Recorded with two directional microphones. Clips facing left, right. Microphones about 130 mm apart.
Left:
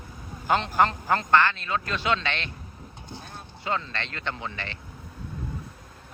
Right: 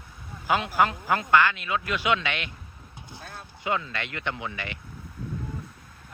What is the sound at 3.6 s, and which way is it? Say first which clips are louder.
A man's voice: right 1 dB; 15° right (ahead or behind).